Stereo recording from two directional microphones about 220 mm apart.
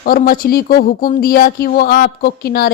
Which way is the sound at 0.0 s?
40° left (ahead or behind).